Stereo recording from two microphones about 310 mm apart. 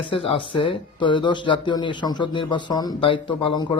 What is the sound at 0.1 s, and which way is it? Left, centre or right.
Speech, centre.